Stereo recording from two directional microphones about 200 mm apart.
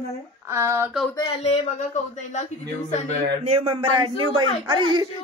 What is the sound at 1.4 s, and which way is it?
Speech, 35° left (ahead or behind).